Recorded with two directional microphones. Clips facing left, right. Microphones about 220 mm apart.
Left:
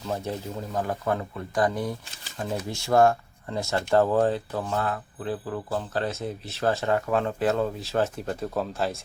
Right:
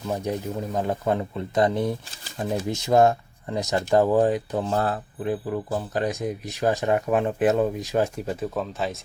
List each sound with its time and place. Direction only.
0.1 s speech: 15° right (ahead or behind)
4.7 s speech: 35° right (ahead or behind)
5.2 s speech: 15° right (ahead or behind)